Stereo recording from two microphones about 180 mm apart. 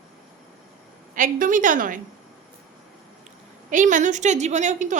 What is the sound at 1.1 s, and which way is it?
Speech, 45° right (ahead or behind).